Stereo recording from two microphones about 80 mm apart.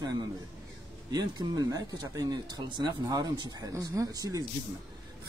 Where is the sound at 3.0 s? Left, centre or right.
Right.